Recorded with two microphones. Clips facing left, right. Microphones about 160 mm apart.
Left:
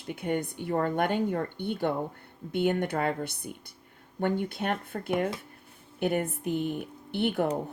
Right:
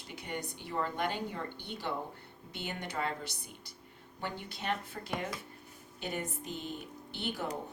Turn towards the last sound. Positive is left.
turn(degrees=60)  # may be behind; listen again after turning